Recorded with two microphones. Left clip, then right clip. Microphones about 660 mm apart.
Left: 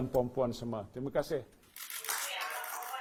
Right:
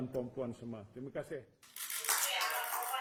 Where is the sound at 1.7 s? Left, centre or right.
Centre.